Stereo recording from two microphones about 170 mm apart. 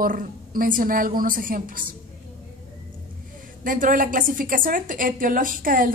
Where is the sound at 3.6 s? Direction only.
55° right (ahead or behind).